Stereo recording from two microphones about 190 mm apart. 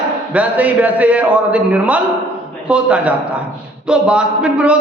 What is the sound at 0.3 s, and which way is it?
A man's voice, 10° right (ahead or behind).